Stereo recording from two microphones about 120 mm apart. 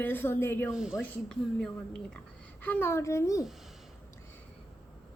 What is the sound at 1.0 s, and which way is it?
A woman's voice, 5° left (ahead or behind).